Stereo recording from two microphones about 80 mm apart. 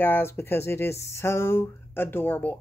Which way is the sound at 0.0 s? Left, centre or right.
Left.